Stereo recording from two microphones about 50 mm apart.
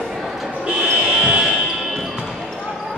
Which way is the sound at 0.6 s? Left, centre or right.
Centre.